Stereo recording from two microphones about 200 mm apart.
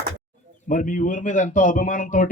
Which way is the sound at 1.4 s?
40° left (ahead or behind).